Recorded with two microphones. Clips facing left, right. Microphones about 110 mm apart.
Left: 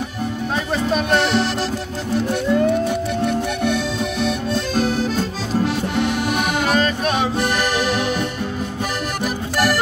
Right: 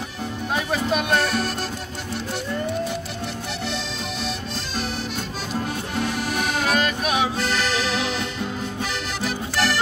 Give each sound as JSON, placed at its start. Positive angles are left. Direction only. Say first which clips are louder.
{"t": 0.7, "sound": "music", "louder": "left 4 dB", "side_deg": -5}
{"t": 1.2, "sound": "music", "louder": "left 5 dB", "side_deg": 90}
{"t": 5.9, "sound": "music", "louder": "left 3 dB", "side_deg": 65}
{"t": 6.7, "sound": "music", "louder": "left 3 dB", "side_deg": -5}
{"t": 9.2, "sound": "music", "louder": "left 4 dB", "side_deg": 10}